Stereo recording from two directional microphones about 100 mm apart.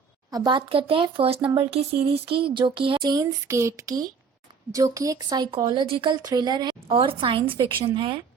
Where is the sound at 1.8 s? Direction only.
80° right.